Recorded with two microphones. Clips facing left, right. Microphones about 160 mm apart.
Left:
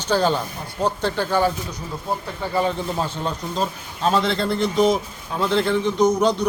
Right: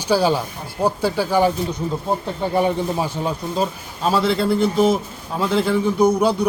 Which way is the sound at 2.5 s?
10° right (ahead or behind).